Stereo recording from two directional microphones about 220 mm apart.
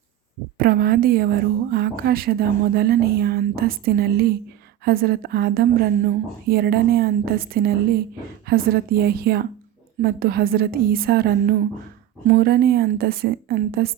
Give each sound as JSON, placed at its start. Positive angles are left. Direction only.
{"t": 0.6, "sound": "a woman's voice", "side_deg": -45}